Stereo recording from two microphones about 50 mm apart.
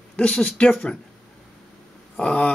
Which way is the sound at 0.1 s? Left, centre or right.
Left.